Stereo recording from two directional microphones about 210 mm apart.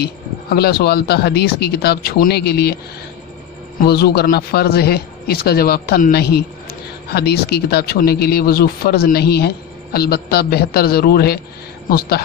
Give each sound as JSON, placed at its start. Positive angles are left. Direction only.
{"t": 0.0, "sound": "a man's voice", "side_deg": 50}
{"t": 3.8, "sound": "a man's voice", "side_deg": 50}